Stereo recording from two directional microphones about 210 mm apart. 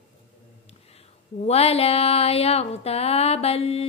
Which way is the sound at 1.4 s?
30° left (ahead or behind).